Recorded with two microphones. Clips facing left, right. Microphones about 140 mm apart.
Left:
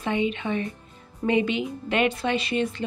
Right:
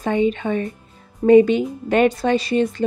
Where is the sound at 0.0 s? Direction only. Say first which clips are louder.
Right 6 dB; 40° right (ahead or behind).